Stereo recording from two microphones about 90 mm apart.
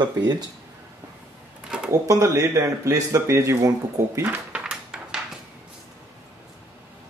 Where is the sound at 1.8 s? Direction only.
35° right (ahead or behind).